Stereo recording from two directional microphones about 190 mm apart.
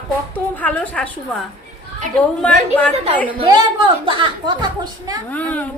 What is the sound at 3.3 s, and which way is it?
A woman's voice, 25° right (ahead or behind).